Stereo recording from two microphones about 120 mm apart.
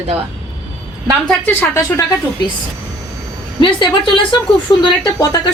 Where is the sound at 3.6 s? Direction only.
45° left (ahead or behind).